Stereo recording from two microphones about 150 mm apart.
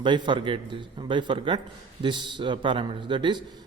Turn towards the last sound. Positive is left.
turn(degrees=-30)  # may be behind; listen again after turning